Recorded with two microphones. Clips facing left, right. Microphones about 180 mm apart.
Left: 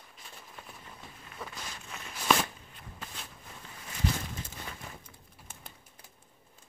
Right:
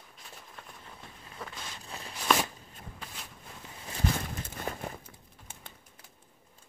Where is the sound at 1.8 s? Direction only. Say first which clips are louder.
Right 2 dB; 35° right (ahead or behind).